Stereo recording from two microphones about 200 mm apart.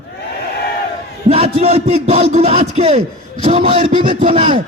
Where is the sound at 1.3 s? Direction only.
30° right (ahead or behind).